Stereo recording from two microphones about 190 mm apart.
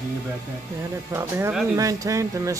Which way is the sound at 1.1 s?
10° right (ahead or behind).